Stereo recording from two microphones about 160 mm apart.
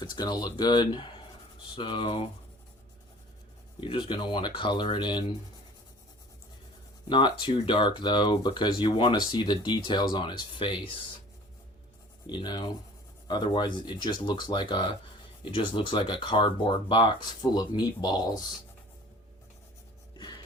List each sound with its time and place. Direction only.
0.2 s speech: 25° left (ahead or behind)
3.8 s speech: 30° left (ahead or behind)
7.1 s speech: 30° left (ahead or behind)
12.3 s speech: 25° left (ahead or behind)
20.1 s a sound: 25° left (ahead or behind)